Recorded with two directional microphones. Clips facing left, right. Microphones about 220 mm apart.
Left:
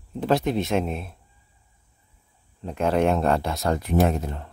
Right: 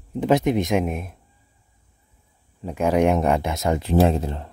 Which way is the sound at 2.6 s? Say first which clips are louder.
Right 2 dB; 10° right (ahead or behind).